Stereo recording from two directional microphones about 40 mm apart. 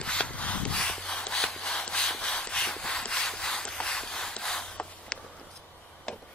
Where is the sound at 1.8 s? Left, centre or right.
Left.